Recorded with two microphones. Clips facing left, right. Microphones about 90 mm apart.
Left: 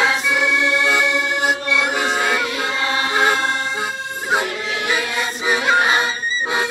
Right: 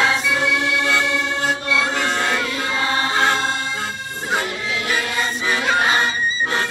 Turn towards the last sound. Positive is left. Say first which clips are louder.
# left 1 dB
turn(degrees=15)  # may be behind; listen again after turning